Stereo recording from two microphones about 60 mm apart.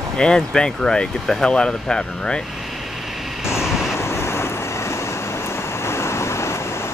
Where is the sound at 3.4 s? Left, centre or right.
Left.